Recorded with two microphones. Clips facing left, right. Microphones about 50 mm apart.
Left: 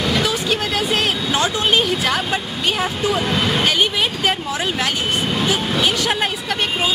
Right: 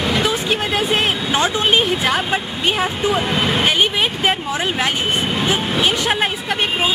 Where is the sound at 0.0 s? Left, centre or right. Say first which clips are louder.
Right 1 dB; centre.